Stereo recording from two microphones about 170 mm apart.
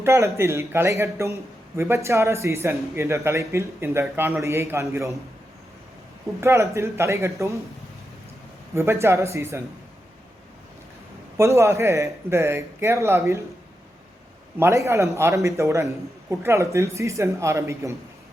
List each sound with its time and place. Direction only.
0.0 s a man's voice: 15° right (ahead or behind)
6.4 s a man's voice: 15° right (ahead or behind)
8.7 s a man's voice: 15° right (ahead or behind)
11.3 s a man's voice: 15° right (ahead or behind)
14.6 s a man's voice: 15° right (ahead or behind)